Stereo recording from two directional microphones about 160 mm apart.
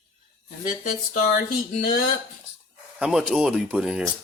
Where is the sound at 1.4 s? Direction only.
65° left (ahead or behind).